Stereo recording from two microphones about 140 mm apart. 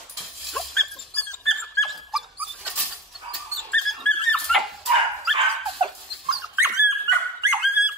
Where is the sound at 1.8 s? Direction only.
Centre (ahead or behind).